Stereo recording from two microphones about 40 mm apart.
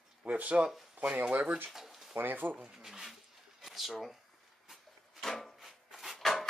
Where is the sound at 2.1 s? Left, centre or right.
Right.